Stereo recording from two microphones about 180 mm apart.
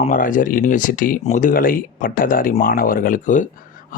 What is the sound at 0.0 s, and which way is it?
Speech, 50° left (ahead or behind).